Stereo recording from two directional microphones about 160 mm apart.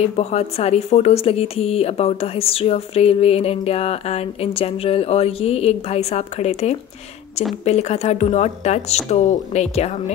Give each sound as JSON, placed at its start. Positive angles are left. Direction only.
{"t": 0.0, "sound": "speech", "side_deg": 40}